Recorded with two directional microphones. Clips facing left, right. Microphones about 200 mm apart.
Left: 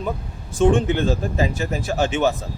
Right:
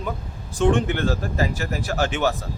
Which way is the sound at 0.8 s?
20° left (ahead or behind).